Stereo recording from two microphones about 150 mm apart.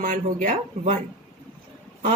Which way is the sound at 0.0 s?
60° right (ahead or behind).